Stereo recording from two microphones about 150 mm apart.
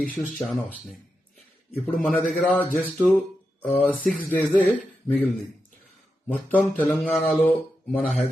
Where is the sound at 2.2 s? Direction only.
Centre (ahead or behind).